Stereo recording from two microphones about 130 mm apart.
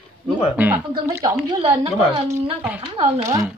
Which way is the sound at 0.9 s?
30° right (ahead or behind).